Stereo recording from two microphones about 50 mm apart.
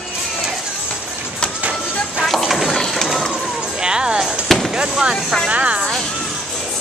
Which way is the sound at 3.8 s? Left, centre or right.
Centre.